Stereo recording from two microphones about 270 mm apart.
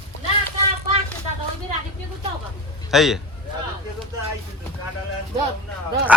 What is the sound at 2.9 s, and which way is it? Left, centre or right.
Speech, centre.